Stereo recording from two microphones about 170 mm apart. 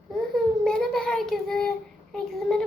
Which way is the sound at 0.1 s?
5° left (ahead or behind).